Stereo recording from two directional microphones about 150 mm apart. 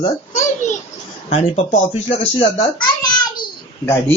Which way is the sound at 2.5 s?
25° left (ahead or behind).